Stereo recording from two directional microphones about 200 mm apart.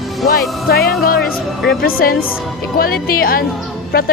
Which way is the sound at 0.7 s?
50° left (ahead or behind).